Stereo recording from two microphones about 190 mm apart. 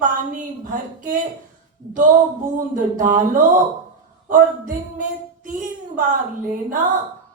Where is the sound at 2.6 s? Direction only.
45° right (ahead or behind).